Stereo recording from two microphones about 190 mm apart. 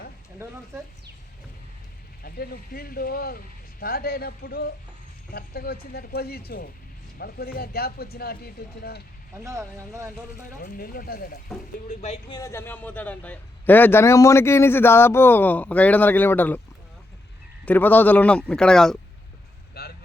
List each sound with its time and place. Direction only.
2.2 s speech: 55° left (ahead or behind)
9.4 s speech: 15° right (ahead or behind)
10.6 s speech: 50° left (ahead or behind)
11.9 s speech: 35° left (ahead or behind)
12.3 s a man's voice: 15° left (ahead or behind)
17.7 s a man's voice: 10° left (ahead or behind)
19.8 s vehicle: 55° left (ahead or behind)